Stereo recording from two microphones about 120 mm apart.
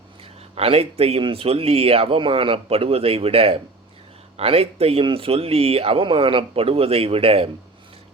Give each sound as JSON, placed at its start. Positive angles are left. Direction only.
{"t": 0.5, "sound": "speech", "side_deg": -55}